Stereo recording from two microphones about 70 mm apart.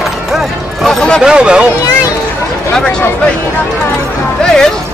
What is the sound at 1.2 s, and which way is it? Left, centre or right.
Speech, centre.